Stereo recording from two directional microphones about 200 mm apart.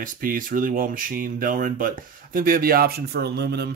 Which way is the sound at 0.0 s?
45° right (ahead or behind).